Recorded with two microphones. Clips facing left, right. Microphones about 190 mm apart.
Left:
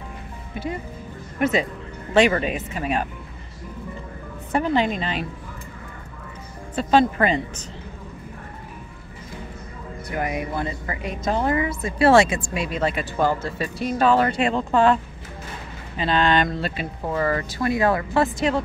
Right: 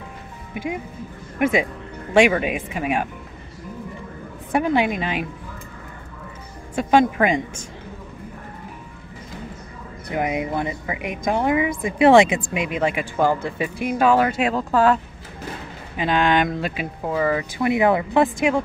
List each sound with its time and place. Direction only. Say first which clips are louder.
1.4 s speech: right 2 dB; 10° right (ahead or behind)
4.5 s speech: right 1 dB; 10° right (ahead or behind)
6.7 s speech: right 1 dB; 15° right (ahead or behind)
10.1 s speech: right 3 dB; 20° right (ahead or behind); by 15.0 s 5° right (ahead or behind)
16.0 s speech: right 1 dB; 15° right (ahead or behind)